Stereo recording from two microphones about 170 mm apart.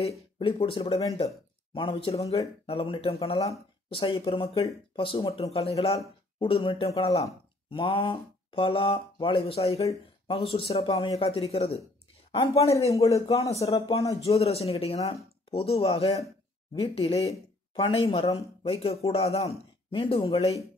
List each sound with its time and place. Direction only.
0.4 s a woman's voice: 30° left (ahead or behind)
12.7 s speech: 20° left (ahead or behind)
13.7 s speech: 30° left (ahead or behind)